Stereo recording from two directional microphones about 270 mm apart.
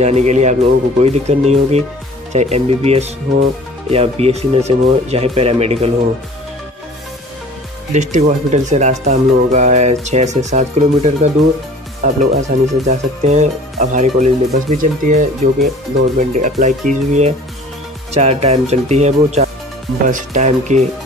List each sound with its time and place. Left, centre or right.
0.0 s speech: right
7.9 s speech: right